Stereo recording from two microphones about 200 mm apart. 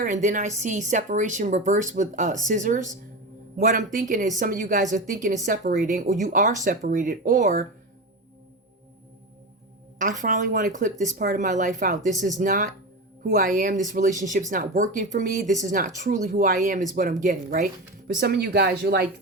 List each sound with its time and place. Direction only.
0.0 s speech: 40° right (ahead or behind)
10.0 s speech: 40° right (ahead or behind)
18.2 s speech: 55° right (ahead or behind)